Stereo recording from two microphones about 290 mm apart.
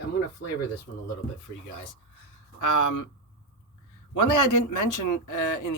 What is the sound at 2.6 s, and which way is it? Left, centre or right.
Speech, left.